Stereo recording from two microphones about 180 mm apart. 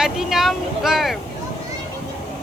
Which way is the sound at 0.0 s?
Centre (ahead or behind).